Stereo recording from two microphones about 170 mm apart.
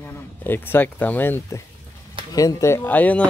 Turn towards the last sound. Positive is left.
turn(degrees=10)  # may be behind; listen again after turning